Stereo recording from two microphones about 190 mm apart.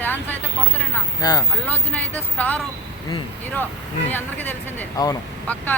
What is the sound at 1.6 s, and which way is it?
Speech, 10° left (ahead or behind).